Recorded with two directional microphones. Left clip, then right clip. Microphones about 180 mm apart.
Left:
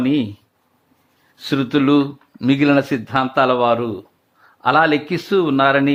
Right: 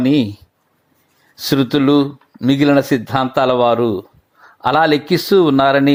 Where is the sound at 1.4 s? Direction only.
25° right (ahead or behind).